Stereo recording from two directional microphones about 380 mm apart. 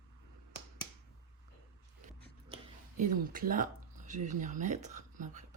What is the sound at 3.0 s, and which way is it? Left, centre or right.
Speech, right.